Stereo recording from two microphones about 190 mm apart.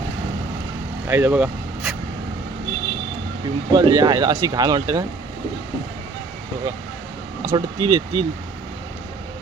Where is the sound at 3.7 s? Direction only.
20° right (ahead or behind).